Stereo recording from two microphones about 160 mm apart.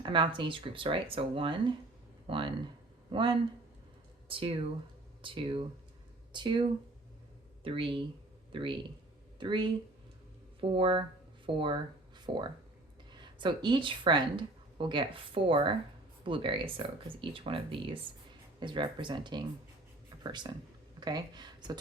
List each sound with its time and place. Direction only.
0.0 s speech: 30° right (ahead or behind)